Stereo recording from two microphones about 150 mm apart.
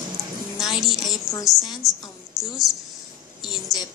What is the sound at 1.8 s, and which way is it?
Speech, centre (ahead or behind).